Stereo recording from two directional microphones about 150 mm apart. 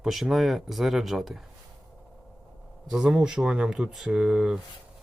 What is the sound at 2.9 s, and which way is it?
Speech, 5° right (ahead or behind).